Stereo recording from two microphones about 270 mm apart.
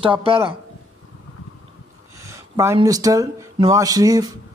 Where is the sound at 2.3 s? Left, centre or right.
Centre.